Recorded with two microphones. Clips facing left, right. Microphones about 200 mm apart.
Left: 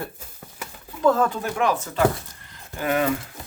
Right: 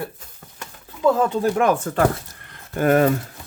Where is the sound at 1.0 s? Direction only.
15° right (ahead or behind).